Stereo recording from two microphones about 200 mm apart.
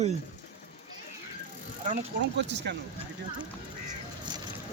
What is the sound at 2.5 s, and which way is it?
Speech, 60° right (ahead or behind).